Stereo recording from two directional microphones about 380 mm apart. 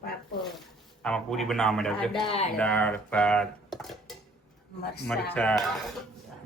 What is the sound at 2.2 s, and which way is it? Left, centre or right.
Speech, centre.